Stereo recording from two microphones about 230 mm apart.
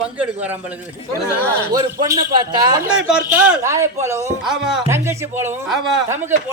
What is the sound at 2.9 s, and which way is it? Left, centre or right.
Speech, centre.